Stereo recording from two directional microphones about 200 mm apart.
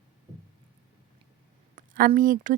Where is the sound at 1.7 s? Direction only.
45° right (ahead or behind).